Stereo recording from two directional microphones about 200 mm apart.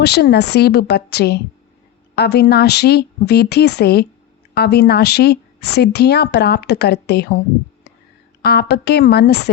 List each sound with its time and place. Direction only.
0.0 s speech: 55° left (ahead or behind)
8.4 s speech: 50° left (ahead or behind)